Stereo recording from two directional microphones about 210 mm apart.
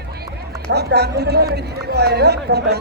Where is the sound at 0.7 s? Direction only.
50° right (ahead or behind).